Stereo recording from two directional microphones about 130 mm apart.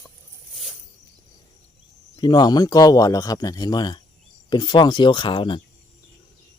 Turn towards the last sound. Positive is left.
turn(degrees=40)  # may be behind; listen again after turning